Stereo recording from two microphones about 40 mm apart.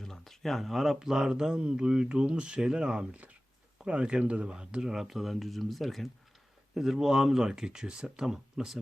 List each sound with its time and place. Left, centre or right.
0.0 s a sound: centre
0.9 s speech: centre
4.9 s speech: centre
6.7 s speech: centre